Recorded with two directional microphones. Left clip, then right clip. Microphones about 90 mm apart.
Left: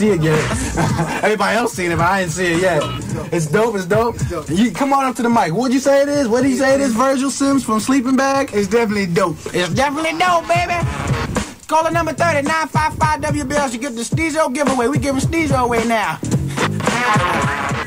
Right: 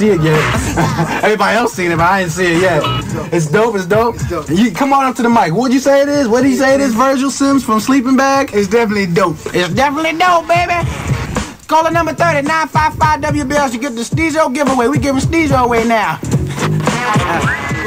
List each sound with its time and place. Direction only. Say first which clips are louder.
0.0 s speech: right 4 dB; 25° left (ahead or behind)
14.1 s music: right 4 dB; 20° left (ahead or behind)